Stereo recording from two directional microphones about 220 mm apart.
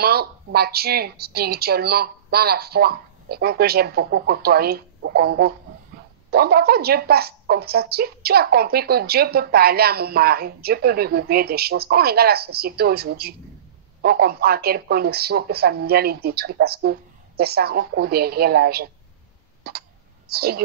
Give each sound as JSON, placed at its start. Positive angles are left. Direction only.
{"t": 0.0, "sound": "a woman's voice", "side_deg": -45}